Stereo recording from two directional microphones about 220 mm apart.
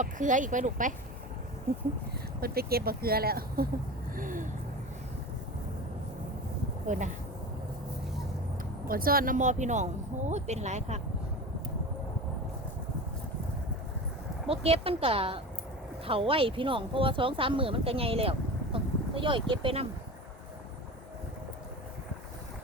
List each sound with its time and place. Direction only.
0.0 s speech: 35° right (ahead or behind)
2.4 s speech: 45° right (ahead or behind)
4.1 s a sound: 40° right (ahead or behind)
6.8 s speech: 35° right (ahead or behind)
8.9 s speech: 40° right (ahead or behind)
14.4 s speech: 25° right (ahead or behind)